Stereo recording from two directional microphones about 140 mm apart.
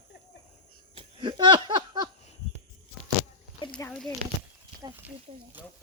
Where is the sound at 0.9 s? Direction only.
35° right (ahead or behind).